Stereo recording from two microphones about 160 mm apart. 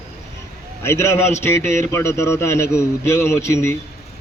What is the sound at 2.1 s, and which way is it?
A man's voice, 15° left (ahead or behind).